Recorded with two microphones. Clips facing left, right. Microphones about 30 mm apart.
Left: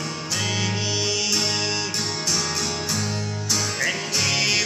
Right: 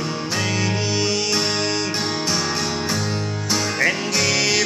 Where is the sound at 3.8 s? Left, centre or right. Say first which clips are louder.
Right 5 dB; centre.